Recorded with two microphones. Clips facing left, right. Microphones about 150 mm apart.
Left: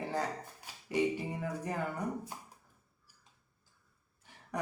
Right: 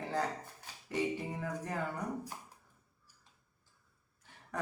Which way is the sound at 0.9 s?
10° left (ahead or behind).